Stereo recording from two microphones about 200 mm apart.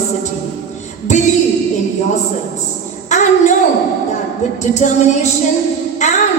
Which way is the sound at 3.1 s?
35° left (ahead or behind).